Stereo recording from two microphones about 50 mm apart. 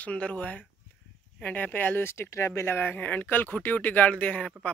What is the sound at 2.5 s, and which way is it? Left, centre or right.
Speech, left.